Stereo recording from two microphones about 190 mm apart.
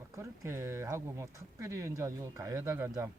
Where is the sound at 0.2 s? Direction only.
15° right (ahead or behind).